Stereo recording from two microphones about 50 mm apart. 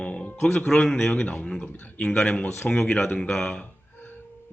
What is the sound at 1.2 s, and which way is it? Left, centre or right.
Speech, left.